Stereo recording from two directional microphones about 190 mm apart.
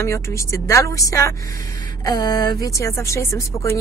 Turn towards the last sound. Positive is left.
turn(degrees=15)  # may be behind; listen again after turning